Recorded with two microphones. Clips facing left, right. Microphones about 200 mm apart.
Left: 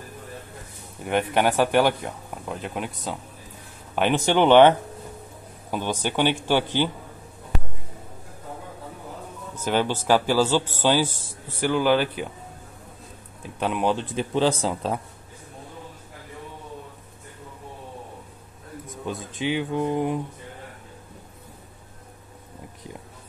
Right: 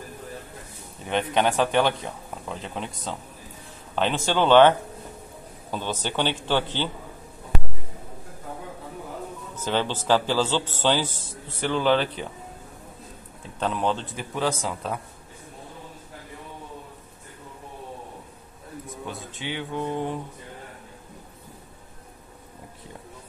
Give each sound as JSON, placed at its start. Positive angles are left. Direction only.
{"t": 1.0, "sound": "a man's voice", "side_deg": 10}
{"t": 9.6, "sound": "a man's voice", "side_deg": 10}
{"t": 13.6, "sound": "a man's voice", "side_deg": 10}
{"t": 14.3, "sound": "speech", "side_deg": 30}
{"t": 19.4, "sound": "a man's voice", "side_deg": 15}